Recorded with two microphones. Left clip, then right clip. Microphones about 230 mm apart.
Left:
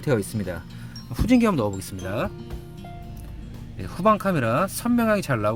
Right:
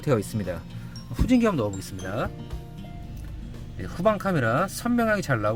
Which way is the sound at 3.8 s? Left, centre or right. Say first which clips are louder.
Left 3 dB; centre.